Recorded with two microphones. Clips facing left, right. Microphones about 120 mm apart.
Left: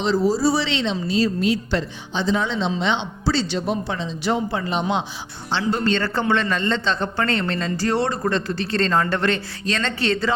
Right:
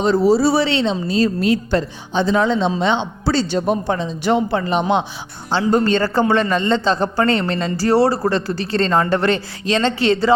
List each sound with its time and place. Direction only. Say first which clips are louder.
0.0 s speech: right 5 dB; 60° right (ahead or behind)
0.8 s speech: right 4 dB; 40° right (ahead or behind); by 5.0 s 55° right (ahead or behind)
5.5 s speech: right 5 dB; 45° right (ahead or behind)